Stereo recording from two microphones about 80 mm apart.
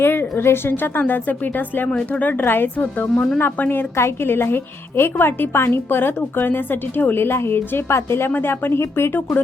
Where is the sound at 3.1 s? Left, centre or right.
Centre.